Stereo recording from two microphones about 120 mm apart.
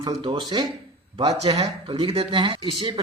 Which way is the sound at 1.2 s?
60° right (ahead or behind).